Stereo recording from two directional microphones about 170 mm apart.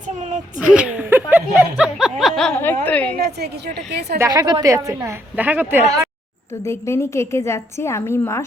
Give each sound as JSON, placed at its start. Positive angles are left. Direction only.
{"t": 0.6, "sound": "speech", "side_deg": -5}
{"t": 4.2, "sound": "a woman's voice", "side_deg": -20}
{"t": 6.7, "sound": "a woman's voice", "side_deg": 15}